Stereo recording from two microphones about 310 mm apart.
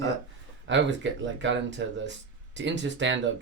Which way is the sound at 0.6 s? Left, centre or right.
Right.